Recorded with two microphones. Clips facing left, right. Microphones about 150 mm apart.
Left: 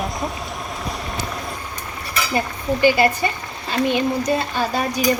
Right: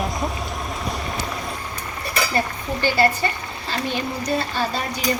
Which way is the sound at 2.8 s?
15° left (ahead or behind).